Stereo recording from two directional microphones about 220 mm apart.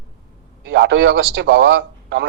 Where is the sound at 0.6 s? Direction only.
50° right (ahead or behind).